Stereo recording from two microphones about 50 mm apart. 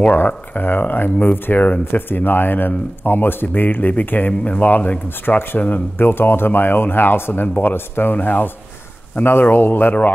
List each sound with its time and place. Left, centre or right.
0.6 s speech: left